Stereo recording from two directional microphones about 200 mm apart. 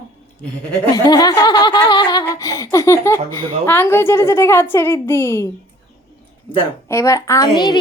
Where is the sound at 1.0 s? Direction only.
20° left (ahead or behind).